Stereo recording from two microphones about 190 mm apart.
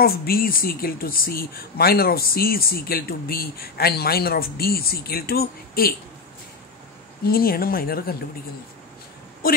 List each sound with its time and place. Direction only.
0.0 s speech: 50° left (ahead or behind)
7.2 s speech: 50° left (ahead or behind)
9.4 s speech: 50° left (ahead or behind)